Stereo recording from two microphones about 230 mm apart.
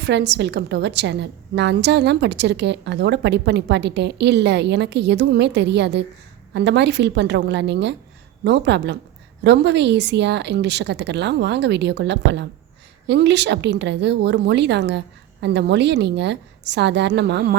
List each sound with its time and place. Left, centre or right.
0.0 s a woman's voice: right